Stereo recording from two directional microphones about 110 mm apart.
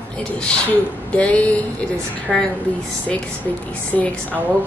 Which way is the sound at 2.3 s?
Centre (ahead or behind).